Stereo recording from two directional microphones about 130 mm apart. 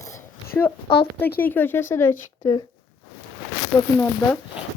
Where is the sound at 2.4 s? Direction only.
30° left (ahead or behind).